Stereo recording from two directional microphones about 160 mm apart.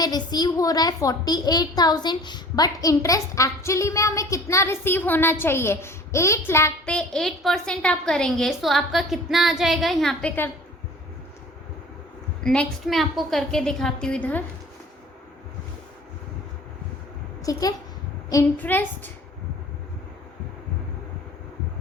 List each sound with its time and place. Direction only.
0.0 s a woman's voice: 25° left (ahead or behind)
12.4 s a woman's voice: 5° left (ahead or behind)
17.4 s a child's voice: 20° left (ahead or behind)